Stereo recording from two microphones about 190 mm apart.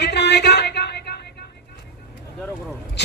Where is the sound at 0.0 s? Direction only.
60° left (ahead or behind).